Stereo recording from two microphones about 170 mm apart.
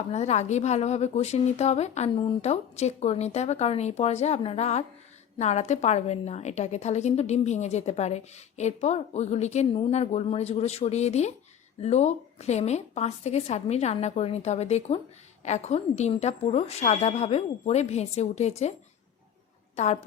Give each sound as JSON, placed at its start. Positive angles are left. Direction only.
{"t": 0.1, "sound": "a woman's voice", "side_deg": 40}
{"t": 19.7, "sound": "a woman's voice", "side_deg": 40}